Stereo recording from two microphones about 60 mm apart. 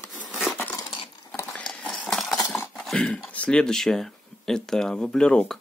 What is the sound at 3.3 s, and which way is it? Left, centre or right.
Speech, centre.